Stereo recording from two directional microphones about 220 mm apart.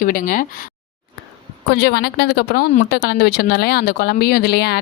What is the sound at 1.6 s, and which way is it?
A woman's voice, 50° left (ahead or behind).